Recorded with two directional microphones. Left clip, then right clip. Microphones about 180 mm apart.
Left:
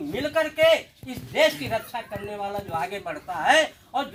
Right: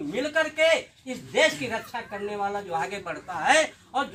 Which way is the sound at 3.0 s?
15° left (ahead or behind).